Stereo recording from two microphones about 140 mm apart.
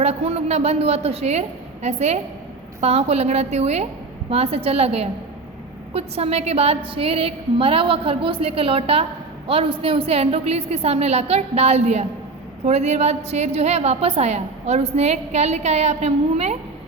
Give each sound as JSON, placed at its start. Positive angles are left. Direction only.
{"t": 0.0, "sound": "a woman's voice", "side_deg": -50}